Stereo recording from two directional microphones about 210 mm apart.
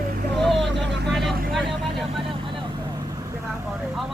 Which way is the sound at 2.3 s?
25° right (ahead or behind).